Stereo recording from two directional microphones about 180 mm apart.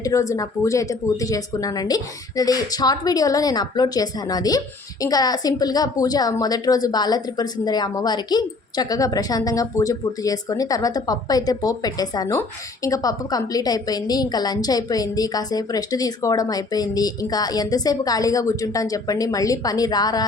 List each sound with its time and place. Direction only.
0.0 s a woman's voice: 15° left (ahead or behind)